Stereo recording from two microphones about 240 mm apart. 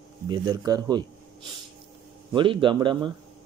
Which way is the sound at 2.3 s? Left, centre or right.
Right.